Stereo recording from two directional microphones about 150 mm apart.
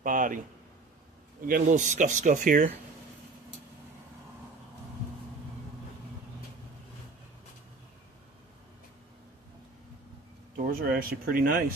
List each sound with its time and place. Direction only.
0.0 s speech: 60° right (ahead or behind)
1.4 s speech: 60° right (ahead or behind)
10.7 s speech: 75° right (ahead or behind)